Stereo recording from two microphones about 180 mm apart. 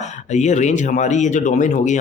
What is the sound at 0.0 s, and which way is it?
Speech, 40° left (ahead or behind).